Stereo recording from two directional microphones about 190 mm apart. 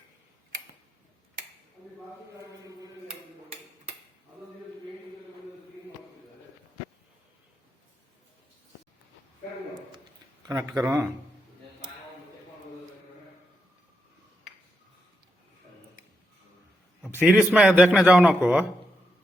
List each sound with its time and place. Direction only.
10.4 s a man's voice: 20° right (ahead or behind)
17.2 s a man's voice: 5° right (ahead or behind)